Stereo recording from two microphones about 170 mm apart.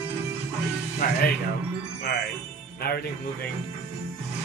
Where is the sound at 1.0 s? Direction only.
60° left (ahead or behind).